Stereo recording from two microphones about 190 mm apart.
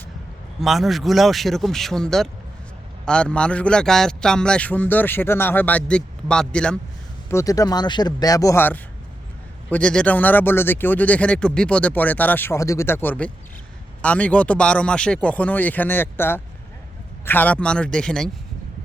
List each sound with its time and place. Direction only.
0.6 s a man's voice: centre (ahead or behind)
7.3 s a man's voice: 15° left (ahead or behind)